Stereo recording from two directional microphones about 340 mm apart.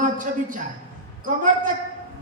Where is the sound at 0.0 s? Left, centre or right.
Right.